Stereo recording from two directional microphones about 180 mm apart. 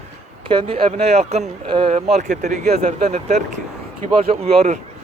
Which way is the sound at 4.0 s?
40° right (ahead or behind).